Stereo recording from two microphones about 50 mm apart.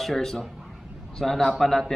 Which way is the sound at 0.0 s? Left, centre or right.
Centre.